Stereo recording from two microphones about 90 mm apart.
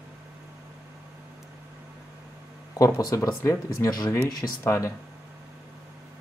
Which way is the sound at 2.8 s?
40° left (ahead or behind).